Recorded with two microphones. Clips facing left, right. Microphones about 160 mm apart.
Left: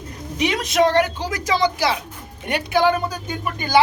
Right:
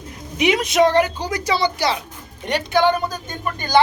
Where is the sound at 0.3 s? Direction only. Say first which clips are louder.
Right 2 dB; 5° right (ahead or behind).